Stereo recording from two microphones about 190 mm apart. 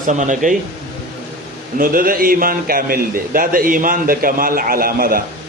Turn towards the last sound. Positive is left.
turn(degrees=-50)  # may be behind; listen again after turning